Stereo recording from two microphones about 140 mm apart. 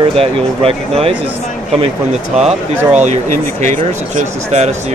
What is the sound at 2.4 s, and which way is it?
Speech, 55° right (ahead or behind).